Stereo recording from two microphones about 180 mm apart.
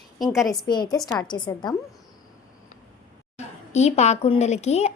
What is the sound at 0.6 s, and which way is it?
A woman's voice, 20° left (ahead or behind).